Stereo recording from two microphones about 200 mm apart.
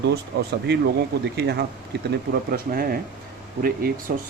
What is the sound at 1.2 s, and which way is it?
Speech, 55° right (ahead or behind).